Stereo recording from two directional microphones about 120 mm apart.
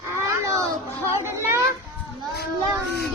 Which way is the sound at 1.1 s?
20° right (ahead or behind).